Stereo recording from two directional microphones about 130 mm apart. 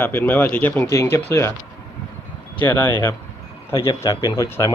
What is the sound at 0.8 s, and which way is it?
Speech, 25° left (ahead or behind).